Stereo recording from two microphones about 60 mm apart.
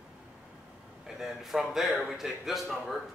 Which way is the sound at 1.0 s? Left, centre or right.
Centre.